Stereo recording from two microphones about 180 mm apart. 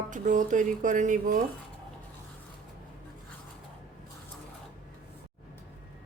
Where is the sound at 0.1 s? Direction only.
45° right (ahead or behind).